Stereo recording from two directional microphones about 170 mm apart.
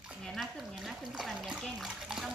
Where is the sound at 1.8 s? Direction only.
5° right (ahead or behind).